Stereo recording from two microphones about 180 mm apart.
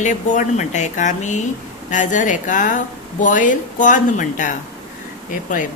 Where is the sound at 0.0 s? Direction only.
40° left (ahead or behind).